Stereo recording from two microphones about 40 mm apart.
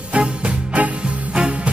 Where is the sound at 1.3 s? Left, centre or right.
Right.